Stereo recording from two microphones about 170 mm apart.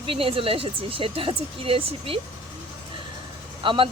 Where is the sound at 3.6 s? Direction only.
30° right (ahead or behind).